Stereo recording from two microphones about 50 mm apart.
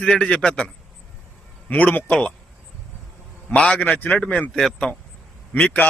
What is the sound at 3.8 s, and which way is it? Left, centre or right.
Speech, left.